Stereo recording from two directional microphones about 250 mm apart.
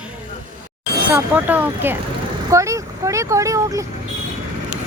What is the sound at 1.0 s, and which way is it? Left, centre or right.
Speech, centre.